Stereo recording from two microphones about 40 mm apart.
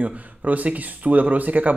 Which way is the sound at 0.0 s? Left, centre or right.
Right.